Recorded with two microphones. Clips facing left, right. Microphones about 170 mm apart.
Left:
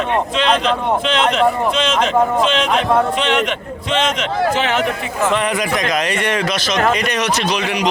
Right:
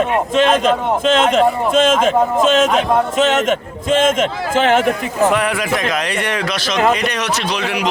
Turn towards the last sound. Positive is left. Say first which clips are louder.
# left 1 dB
turn(degrees=0)  # may be behind; listen again after turning